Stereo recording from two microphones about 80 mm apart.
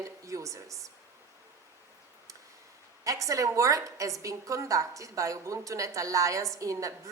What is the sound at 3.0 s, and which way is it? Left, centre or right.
A woman's voice, right.